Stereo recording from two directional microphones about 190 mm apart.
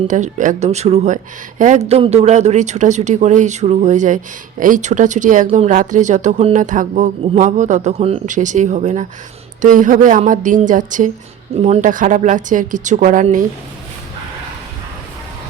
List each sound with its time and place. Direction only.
0.1 s a woman's voice: 40° right (ahead or behind)